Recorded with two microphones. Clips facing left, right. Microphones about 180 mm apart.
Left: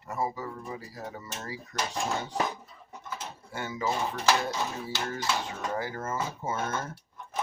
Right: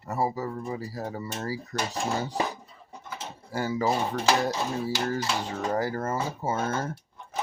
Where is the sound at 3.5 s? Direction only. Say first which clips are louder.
Right 5 dB; 35° right (ahead or behind).